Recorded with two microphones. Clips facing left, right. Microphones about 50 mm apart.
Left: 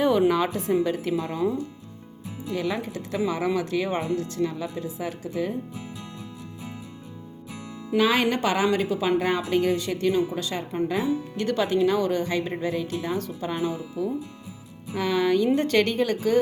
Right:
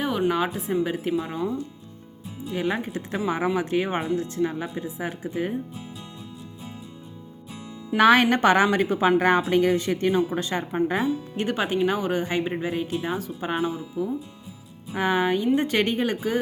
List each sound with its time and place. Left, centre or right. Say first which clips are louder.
0.0 s a sound: left 5 dB; centre
0.3 s a woman's voice: left 1 dB; centre
2.5 s speech: right 1 dB; right
7.9 s a woman's voice: right 4 dB; right
11.3 s speech: left 2 dB; right